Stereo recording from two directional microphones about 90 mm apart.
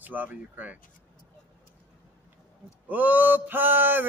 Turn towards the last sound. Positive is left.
turn(degrees=-20)  # may be behind; listen again after turning